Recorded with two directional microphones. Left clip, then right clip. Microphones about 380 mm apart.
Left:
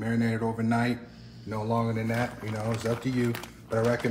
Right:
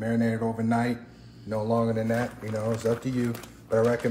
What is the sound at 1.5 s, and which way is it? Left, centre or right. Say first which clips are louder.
Speech: right 3 dB; centre.